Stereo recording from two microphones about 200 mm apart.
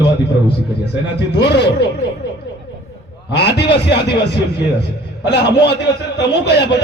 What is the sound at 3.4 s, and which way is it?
Speech, 55° left (ahead or behind).